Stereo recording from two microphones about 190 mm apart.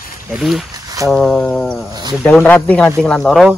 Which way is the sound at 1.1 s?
5° left (ahead or behind).